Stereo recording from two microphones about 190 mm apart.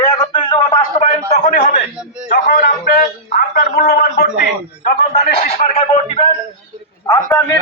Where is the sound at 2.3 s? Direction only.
50° left (ahead or behind).